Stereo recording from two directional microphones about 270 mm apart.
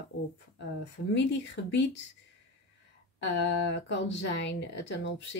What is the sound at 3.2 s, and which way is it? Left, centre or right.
Speech, left.